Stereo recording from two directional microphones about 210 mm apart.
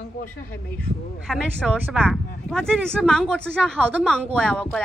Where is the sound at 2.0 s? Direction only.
5° left (ahead or behind).